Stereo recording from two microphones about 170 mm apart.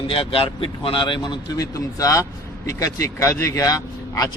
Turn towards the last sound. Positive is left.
turn(degrees=20)  # may be behind; listen again after turning